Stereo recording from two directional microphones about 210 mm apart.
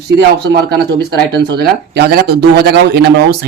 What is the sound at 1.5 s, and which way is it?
Speech, 50° right (ahead or behind).